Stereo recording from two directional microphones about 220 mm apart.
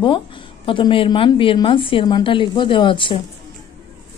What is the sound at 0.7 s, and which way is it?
A woman's voice, 20° left (ahead or behind).